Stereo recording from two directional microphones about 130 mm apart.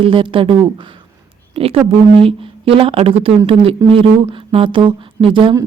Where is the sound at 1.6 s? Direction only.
50° right (ahead or behind).